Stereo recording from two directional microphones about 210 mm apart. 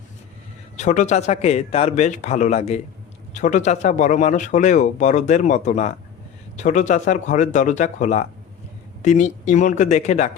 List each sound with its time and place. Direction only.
0.8 s speech: 35° left (ahead or behind)